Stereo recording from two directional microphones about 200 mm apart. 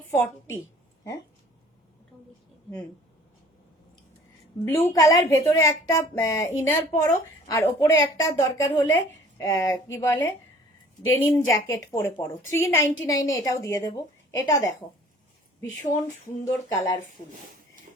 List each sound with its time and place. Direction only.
0.2 s a woman's voice: 15° left (ahead or behind)
4.6 s a woman's voice: 10° left (ahead or behind)
16.0 s a woman's voice: 15° left (ahead or behind)